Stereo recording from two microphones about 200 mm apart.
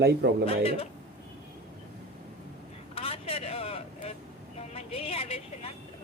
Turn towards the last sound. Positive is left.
turn(degrees=30)  # may be behind; listen again after turning